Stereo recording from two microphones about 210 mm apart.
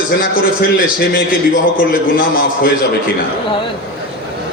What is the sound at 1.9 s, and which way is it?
Speech, 45° left (ahead or behind).